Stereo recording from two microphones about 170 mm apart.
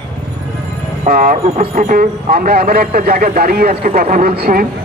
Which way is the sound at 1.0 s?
55° right (ahead or behind).